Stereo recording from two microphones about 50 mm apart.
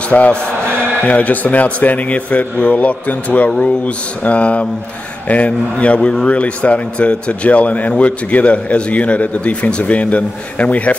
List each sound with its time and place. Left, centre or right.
0.1 s speech: left